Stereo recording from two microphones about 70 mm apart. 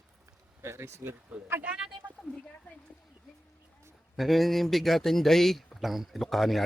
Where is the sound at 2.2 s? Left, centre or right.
Centre.